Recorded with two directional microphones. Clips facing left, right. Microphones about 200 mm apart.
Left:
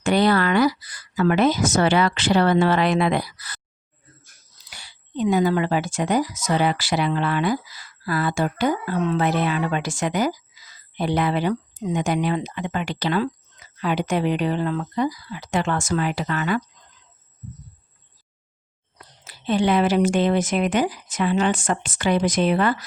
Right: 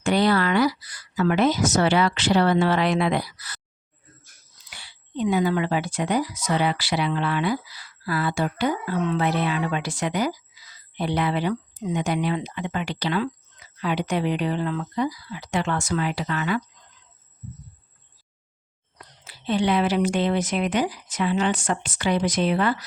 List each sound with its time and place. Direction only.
0.0 s speech: 55° left (ahead or behind)
4.7 s speech: 45° left (ahead or behind)
19.2 s speech: 45° left (ahead or behind)